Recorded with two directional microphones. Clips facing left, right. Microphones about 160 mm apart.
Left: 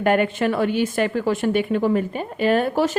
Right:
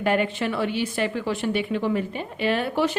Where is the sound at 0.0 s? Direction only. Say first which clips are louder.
Left 4 dB; 55° left (ahead or behind).